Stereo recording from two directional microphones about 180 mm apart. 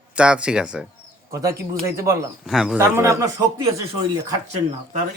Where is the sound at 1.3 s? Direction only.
15° right (ahead or behind).